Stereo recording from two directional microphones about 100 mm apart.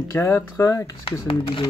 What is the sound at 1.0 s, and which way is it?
Speech, 60° left (ahead or behind).